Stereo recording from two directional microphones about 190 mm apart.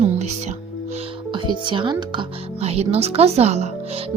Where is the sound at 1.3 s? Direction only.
25° right (ahead or behind).